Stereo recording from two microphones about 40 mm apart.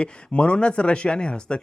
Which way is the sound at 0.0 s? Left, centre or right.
Left.